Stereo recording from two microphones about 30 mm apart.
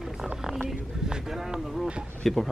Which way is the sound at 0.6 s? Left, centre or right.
Right.